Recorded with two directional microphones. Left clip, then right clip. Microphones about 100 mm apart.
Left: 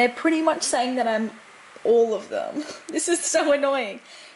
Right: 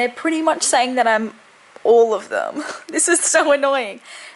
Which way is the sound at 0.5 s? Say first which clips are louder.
Right 7 dB; 20° right (ahead or behind).